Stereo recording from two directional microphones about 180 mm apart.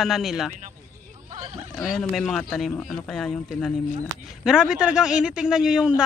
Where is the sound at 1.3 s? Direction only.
30° right (ahead or behind).